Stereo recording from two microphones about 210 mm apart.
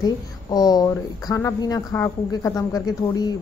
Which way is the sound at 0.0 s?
20° left (ahead or behind).